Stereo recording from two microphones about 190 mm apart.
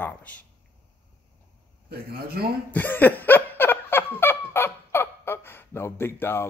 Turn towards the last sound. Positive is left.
turn(degrees=10)  # may be behind; listen again after turning